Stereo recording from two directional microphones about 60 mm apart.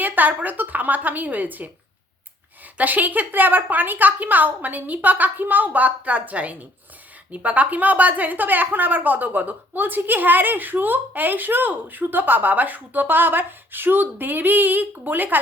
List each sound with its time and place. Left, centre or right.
0.0 s a woman's voice: right
2.7 s a woman's voice: right